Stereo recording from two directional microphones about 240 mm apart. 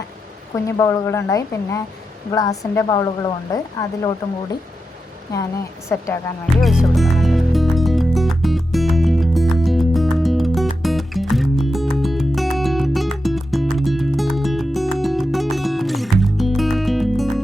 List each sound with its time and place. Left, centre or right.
0.5 s speech: centre
5.9 s speech: centre
6.4 s music: centre